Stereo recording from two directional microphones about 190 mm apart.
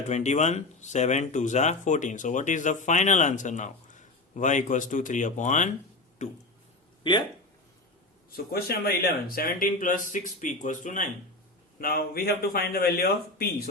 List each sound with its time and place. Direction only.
0.1 s speech: 35° left (ahead or behind)
7.0 s speech: 25° left (ahead or behind)
8.5 s speech: 55° left (ahead or behind)